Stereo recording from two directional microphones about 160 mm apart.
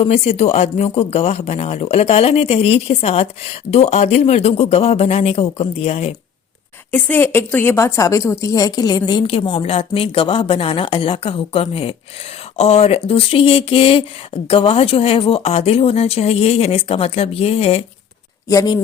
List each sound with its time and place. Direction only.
0.0 s speech: 40° left (ahead or behind)
6.9 s a woman's voice: 15° left (ahead or behind); by 17.8 s 40° left (ahead or behind)
18.4 s a woman's voice: 25° left (ahead or behind)